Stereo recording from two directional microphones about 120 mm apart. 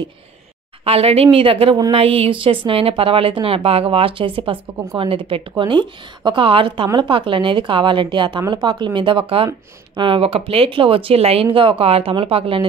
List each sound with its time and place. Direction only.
0.8 s a woman's voice: 55° right (ahead or behind)